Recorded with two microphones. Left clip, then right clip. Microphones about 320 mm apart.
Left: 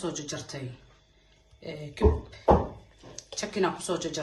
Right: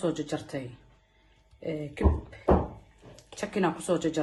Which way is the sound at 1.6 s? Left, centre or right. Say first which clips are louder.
Right 6 dB; centre.